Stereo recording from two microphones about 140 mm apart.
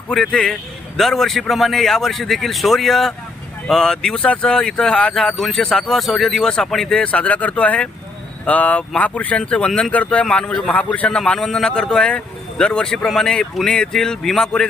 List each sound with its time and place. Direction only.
0.1 s speech: 5° left (ahead or behind)